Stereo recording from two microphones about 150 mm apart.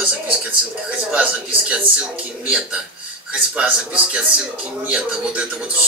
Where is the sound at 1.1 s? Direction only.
5° right (ahead or behind).